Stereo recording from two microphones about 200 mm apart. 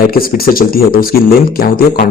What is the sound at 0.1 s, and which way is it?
A man's voice, 45° left (ahead or behind).